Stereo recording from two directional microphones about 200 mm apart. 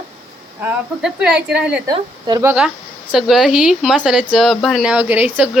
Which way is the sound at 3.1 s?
Centre (ahead or behind).